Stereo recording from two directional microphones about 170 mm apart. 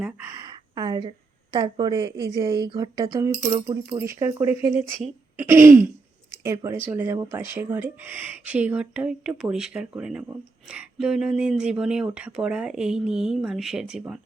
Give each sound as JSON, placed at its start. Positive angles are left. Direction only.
{"t": 0.0, "sound": "a woman's voice", "side_deg": -15}
{"t": 5.4, "sound": "throat clearing", "side_deg": -15}
{"t": 6.4, "sound": "speech", "side_deg": -15}